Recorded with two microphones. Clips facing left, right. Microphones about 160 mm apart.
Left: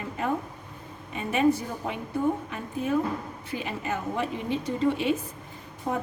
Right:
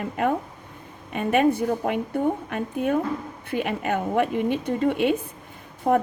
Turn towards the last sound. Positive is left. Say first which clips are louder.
# right 9 dB
turn(degrees=-55)  # may be behind; listen again after turning